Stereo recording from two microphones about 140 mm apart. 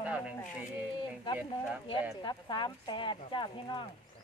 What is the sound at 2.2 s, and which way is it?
Speech, 30° left (ahead or behind).